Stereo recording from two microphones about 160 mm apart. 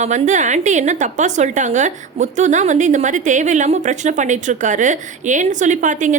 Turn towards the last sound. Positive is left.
turn(degrees=-50)  # may be behind; listen again after turning